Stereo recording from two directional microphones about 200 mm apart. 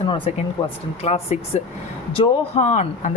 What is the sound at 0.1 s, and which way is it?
A man's voice, 30° left (ahead or behind).